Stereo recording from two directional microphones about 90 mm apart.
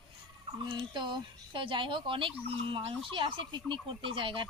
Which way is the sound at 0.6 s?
55° right (ahead or behind).